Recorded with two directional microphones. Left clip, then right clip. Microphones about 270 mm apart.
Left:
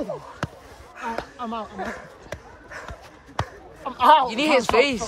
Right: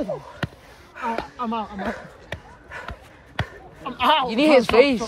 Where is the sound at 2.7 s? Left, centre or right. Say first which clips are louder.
Right 2 dB; centre.